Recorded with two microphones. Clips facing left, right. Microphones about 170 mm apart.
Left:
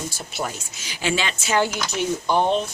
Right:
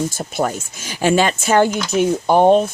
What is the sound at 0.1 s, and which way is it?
Speech, 50° right (ahead or behind).